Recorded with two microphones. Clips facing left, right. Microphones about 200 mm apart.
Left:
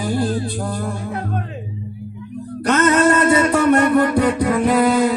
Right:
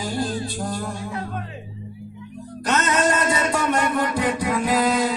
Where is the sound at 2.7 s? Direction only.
60° left (ahead or behind).